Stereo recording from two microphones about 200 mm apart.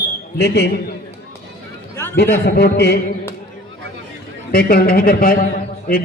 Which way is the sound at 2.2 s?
55° left (ahead or behind).